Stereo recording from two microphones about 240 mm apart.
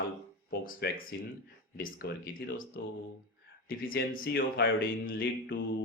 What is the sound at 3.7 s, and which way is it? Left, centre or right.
A man's voice, left.